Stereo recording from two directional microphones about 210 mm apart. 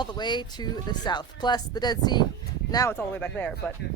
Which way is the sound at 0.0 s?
20° left (ahead or behind).